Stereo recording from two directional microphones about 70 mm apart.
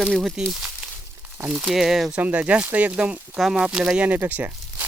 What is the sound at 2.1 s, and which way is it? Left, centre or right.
Speech, right.